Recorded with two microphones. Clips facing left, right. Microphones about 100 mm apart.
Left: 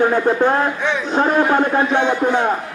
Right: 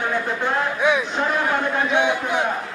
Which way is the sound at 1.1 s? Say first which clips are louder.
Left 7 dB; 40° left (ahead or behind).